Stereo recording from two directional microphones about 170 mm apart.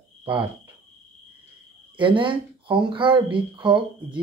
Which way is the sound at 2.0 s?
30° right (ahead or behind).